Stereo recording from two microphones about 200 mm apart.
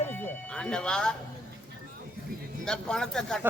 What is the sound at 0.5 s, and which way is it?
Music, 5° left (ahead or behind).